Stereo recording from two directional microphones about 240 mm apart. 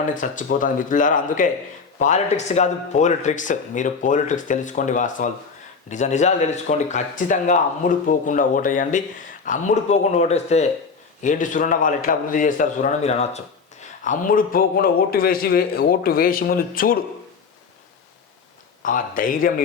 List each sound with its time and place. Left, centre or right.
0.1 s speech: left
18.8 s speech: left